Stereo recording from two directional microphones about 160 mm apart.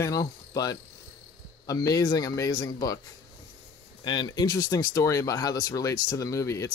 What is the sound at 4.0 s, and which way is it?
Speech, 25° left (ahead or behind).